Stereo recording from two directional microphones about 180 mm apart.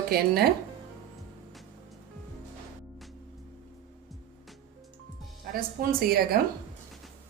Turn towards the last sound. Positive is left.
turn(degrees=-55)  # may be behind; listen again after turning